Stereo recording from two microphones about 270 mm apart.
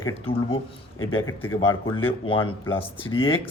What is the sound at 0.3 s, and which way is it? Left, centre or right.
Speech, left.